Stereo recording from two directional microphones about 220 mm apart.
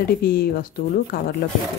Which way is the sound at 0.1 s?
40° left (ahead or behind).